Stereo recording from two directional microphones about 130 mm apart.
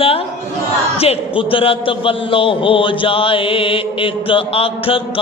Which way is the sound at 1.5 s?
45° left (ahead or behind).